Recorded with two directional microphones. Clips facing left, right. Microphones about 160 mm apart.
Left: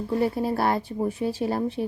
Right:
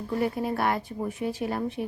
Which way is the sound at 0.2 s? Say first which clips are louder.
Left 2 dB; 30° left (ahead or behind).